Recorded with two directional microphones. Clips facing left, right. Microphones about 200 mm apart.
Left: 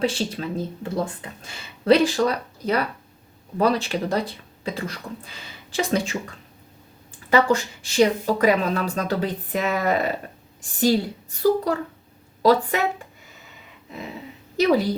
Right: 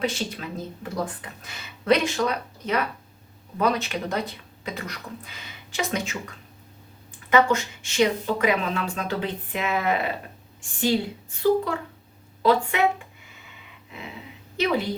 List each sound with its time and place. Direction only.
0.0 s speech: 30° left (ahead or behind)
14.5 s a woman's voice: 40° left (ahead or behind)